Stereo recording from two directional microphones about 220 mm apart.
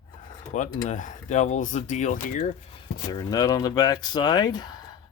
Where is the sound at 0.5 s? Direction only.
35° left (ahead or behind).